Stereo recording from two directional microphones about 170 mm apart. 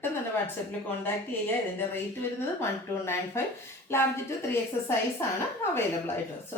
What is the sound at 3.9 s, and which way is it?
A woman's voice, 15° left (ahead or behind).